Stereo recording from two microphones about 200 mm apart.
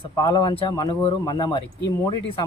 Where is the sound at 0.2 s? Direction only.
20° left (ahead or behind).